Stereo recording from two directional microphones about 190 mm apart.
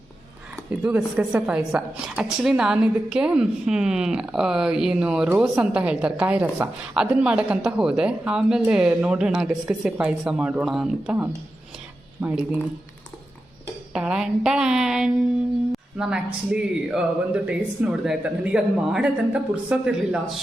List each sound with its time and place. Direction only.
0.7 s a woman's voice: 5° right (ahead or behind)
13.9 s a woman's voice: 5° right (ahead or behind)